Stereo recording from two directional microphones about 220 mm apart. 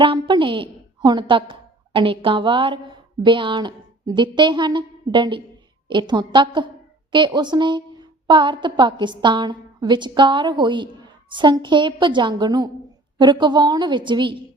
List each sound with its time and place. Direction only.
0.0 s a woman's voice: 20° right (ahead or behind)